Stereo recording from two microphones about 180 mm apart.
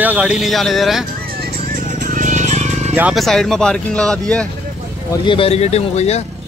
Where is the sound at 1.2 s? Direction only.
60° right (ahead or behind).